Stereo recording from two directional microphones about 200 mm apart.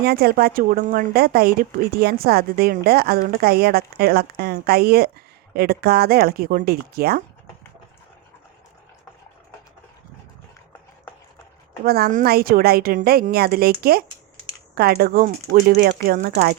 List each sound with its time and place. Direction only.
0.0 s speech: 50° right (ahead or behind)
11.9 s speech: 50° right (ahead or behind)